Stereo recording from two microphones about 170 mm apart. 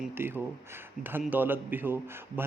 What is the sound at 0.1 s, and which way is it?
A man's voice, 15° right (ahead or behind).